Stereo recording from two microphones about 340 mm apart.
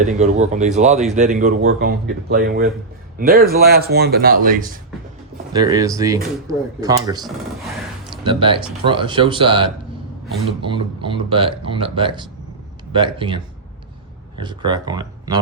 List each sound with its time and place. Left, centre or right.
0.1 s a man's voice: right
5.5 s speech: centre